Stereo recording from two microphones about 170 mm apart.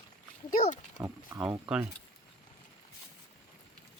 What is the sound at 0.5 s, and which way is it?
Pig, 50° left (ahead or behind).